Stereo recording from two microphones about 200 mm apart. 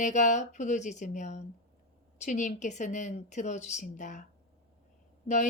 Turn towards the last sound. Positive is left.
turn(degrees=35)  # may be behind; listen again after turning